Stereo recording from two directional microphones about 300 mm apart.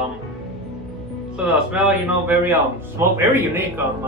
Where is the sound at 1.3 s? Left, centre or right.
Centre.